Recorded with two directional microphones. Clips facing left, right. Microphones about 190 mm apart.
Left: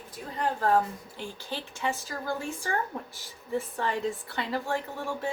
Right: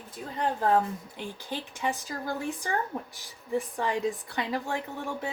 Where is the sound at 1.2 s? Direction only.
15° right (ahead or behind).